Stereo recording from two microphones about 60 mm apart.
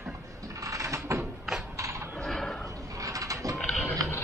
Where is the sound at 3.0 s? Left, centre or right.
Right.